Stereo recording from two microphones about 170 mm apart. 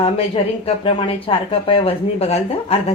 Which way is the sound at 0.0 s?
35° left (ahead or behind).